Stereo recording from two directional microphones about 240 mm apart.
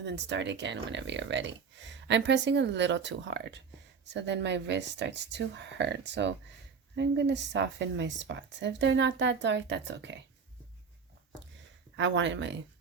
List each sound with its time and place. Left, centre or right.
0.0 s speech: right
11.9 s speech: right